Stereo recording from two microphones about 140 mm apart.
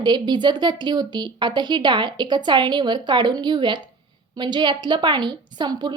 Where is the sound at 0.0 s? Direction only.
30° right (ahead or behind).